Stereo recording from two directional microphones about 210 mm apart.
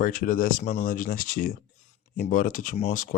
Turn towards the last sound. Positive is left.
turn(degrees=40)  # may be behind; listen again after turning